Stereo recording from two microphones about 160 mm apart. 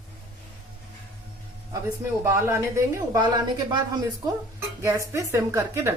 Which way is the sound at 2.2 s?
15° right (ahead or behind).